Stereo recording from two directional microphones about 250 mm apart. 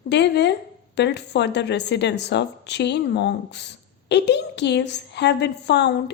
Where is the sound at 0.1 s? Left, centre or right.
Left.